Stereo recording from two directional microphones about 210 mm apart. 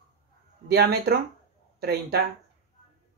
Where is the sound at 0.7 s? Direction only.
50° right (ahead or behind).